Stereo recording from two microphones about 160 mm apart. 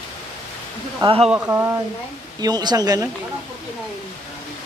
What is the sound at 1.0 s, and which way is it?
Speech, 30° right (ahead or behind).